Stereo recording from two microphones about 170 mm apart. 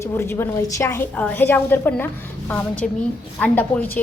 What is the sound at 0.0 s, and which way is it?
A woman's voice, 15° left (ahead or behind).